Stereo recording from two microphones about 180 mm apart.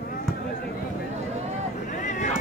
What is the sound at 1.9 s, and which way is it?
Vehicle, 45° left (ahead or behind).